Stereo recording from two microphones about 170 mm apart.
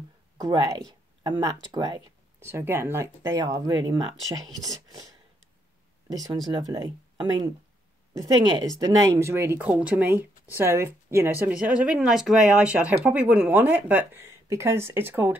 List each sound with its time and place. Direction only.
0.4 s speech: 20° right (ahead or behind)
2.4 s speech: 15° right (ahead or behind)
6.0 s speech: 20° right (ahead or behind)
8.7 s speech: 20° right (ahead or behind)